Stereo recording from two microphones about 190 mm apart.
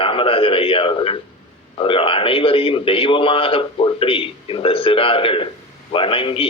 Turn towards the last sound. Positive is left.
turn(degrees=30)  # may be behind; listen again after turning